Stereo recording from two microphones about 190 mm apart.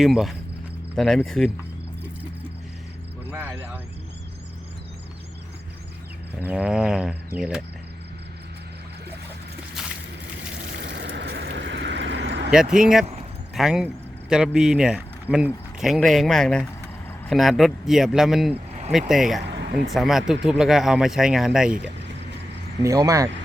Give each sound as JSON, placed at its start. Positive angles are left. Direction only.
{"t": 0.0, "sound": "speech", "side_deg": 0}
{"t": 3.2, "sound": "vehicle", "side_deg": -10}
{"t": 6.4, "sound": "speech", "side_deg": -5}
{"t": 10.8, "sound": "vehicle", "side_deg": -65}
{"t": 12.5, "sound": "speech", "side_deg": -5}
{"t": 19.5, "sound": "a sound", "side_deg": -65}
{"t": 19.9, "sound": "speech", "side_deg": 0}
{"t": 22.8, "sound": "speech", "side_deg": -15}